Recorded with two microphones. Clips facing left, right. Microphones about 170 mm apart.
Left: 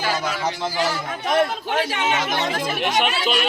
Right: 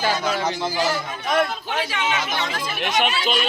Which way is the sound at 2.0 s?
45° left (ahead or behind).